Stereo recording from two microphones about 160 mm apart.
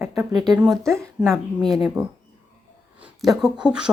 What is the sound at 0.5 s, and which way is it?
Speech, centre (ahead or behind).